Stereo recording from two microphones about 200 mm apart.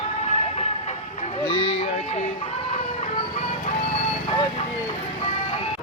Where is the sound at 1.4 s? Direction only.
25° left (ahead or behind).